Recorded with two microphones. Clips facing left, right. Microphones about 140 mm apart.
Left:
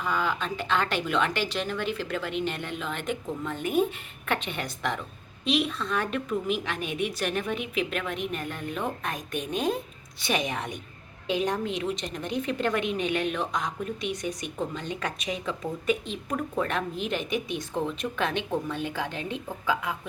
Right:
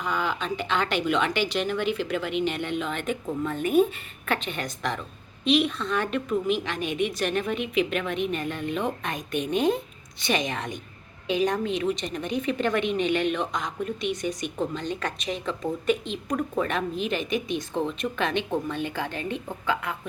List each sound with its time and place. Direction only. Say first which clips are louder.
0.0 s a woman's voice: even; centre (ahead or behind)
4.3 s a woman's voice: right 1 dB; 10° left (ahead or behind)
16.3 s a woman's voice: right 2 dB; 5° right (ahead or behind)